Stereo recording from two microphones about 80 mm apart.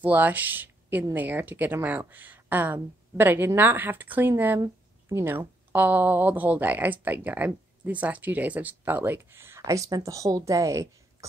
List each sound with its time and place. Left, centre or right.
0.0 s speech: right
9.7 s a woman's voice: right